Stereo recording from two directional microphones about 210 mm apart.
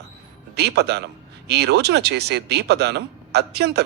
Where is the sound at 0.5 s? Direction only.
50° right (ahead or behind).